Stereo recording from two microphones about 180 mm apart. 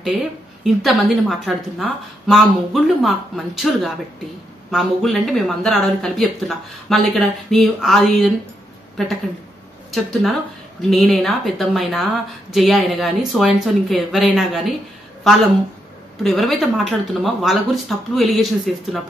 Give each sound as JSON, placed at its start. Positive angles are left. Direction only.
{"t": 0.0, "sound": "a woman's voice", "side_deg": 0}
{"t": 9.8, "sound": "speech", "side_deg": 0}
{"t": 16.2, "sound": "speech", "side_deg": 0}